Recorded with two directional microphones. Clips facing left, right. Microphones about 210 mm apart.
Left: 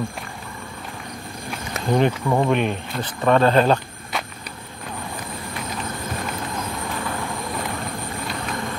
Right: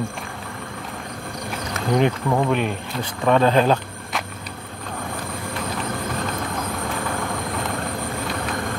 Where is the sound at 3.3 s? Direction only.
10° right (ahead or behind).